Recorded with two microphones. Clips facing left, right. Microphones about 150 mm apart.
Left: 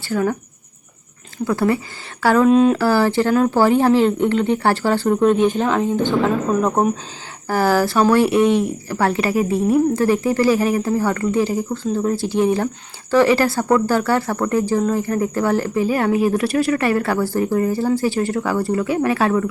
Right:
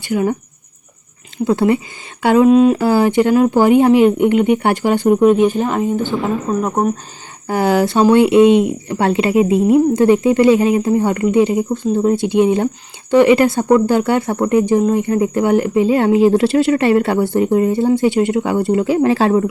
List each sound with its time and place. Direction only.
0.1 s speech: 15° right (ahead or behind)
1.5 s speech: 20° right (ahead or behind)
2.5 s speech: 5° right (ahead or behind)
2.7 s speech: 20° right (ahead or behind)
7.4 s speech: 20° right (ahead or behind)